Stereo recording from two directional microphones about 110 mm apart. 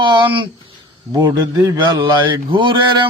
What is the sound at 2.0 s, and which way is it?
Speech, 50° right (ahead or behind).